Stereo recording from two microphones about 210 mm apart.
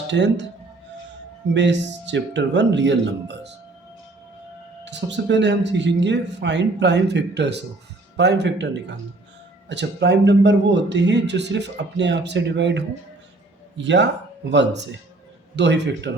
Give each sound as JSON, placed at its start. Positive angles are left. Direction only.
{"t": 0.1, "sound": "speech", "side_deg": -55}
{"t": 1.5, "sound": "speech", "side_deg": -60}
{"t": 4.9, "sound": "speech", "side_deg": -55}